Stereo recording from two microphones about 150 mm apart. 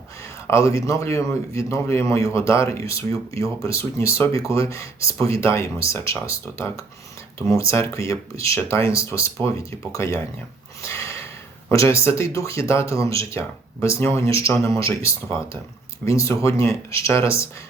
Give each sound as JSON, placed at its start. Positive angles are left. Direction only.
{"t": 0.4, "sound": "speech", "side_deg": 20}
{"t": 10.8, "sound": "a sound", "side_deg": 20}
{"t": 11.7, "sound": "speech", "side_deg": 20}